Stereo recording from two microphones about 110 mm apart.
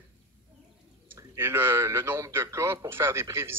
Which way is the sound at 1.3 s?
20° right (ahead or behind).